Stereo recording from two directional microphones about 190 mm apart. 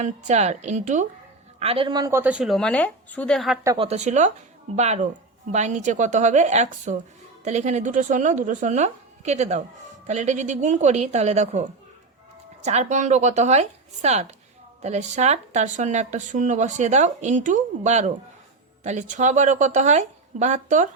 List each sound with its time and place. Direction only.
0.0 s speech: 35° right (ahead or behind); by 3.6 s centre (ahead or behind)
3.8 s speech: 35° right (ahead or behind)
5.5 s speech: 40° right (ahead or behind)